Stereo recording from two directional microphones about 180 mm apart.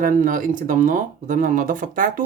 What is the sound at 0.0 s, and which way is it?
Speech, 50° right (ahead or behind).